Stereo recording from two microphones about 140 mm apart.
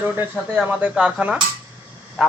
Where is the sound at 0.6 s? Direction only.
5° right (ahead or behind).